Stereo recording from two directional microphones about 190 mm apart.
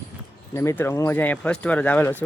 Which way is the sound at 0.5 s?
15° left (ahead or behind).